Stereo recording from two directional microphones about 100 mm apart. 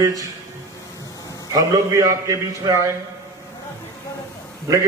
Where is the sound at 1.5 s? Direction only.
30° right (ahead or behind).